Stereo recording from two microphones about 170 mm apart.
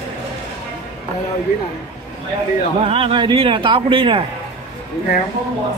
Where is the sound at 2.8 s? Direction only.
35° right (ahead or behind).